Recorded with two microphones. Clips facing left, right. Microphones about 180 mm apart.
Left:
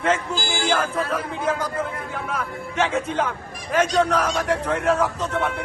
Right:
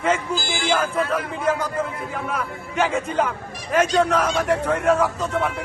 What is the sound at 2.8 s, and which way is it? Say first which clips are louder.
A man's voice: right 1 dB; 5° right (ahead or behind).